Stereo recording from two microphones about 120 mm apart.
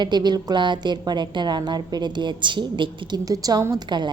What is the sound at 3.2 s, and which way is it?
Speech, 30° right (ahead or behind).